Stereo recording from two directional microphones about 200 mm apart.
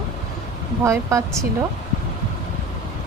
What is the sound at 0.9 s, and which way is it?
Speech, 15° right (ahead or behind).